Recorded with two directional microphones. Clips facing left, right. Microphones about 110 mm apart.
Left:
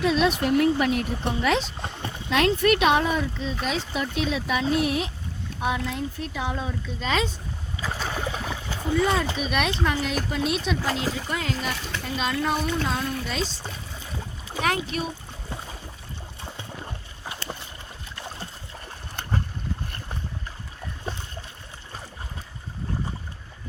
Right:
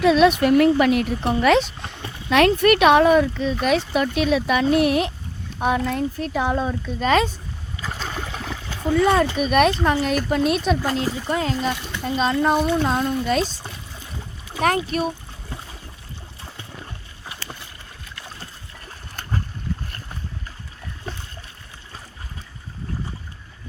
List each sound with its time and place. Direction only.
0.0 s speech: 70° right (ahead or behind)
5.5 s speech: 50° right (ahead or behind)
7.9 s a sound: 10° left (ahead or behind)
9.0 s speech: 55° right (ahead or behind)
11.3 s a child's voice: 35° right (ahead or behind); by 13.4 s 50° right (ahead or behind)
14.6 s speech: 45° right (ahead or behind)